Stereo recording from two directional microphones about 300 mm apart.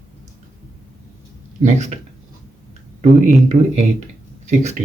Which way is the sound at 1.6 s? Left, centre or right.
Right.